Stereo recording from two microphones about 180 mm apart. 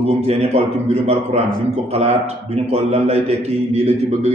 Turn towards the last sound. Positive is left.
turn(degrees=-35)  # may be behind; listen again after turning